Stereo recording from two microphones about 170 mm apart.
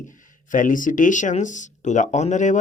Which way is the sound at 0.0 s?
50° left (ahead or behind).